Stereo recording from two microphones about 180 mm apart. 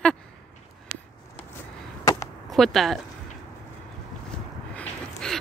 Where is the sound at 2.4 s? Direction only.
Centre (ahead or behind).